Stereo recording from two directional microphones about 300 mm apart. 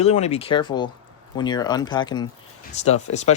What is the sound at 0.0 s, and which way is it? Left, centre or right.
Speech, left.